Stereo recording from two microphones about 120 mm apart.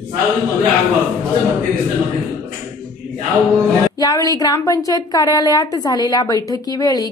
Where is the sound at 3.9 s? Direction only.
30° left (ahead or behind).